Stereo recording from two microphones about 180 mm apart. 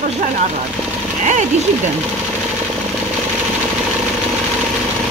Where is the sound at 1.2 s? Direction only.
45° right (ahead or behind).